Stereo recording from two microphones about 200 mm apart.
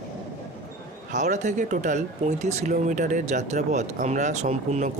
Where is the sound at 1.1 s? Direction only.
35° right (ahead or behind).